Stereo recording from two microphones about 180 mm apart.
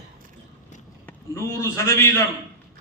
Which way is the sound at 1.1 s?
15° left (ahead or behind).